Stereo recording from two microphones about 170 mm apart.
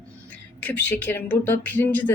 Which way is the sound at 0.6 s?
10° left (ahead or behind).